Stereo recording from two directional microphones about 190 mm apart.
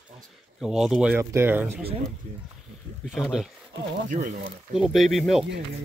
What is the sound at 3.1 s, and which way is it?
Speech, centre (ahead or behind).